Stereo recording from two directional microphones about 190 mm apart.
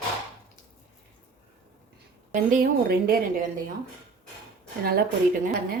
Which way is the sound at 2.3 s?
45° right (ahead or behind).